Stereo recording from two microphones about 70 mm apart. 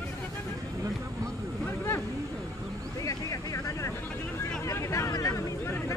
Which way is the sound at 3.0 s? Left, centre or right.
Left.